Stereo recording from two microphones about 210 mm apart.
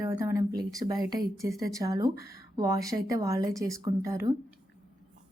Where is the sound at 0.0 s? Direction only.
15° right (ahead or behind).